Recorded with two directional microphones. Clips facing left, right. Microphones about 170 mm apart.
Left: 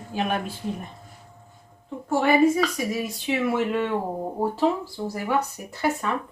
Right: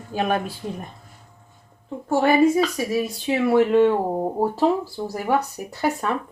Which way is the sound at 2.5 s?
35° right (ahead or behind).